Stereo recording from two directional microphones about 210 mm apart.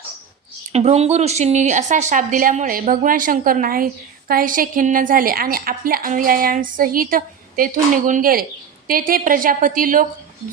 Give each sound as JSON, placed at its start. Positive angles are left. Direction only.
{"t": 0.7, "sound": "a woman's voice", "side_deg": -30}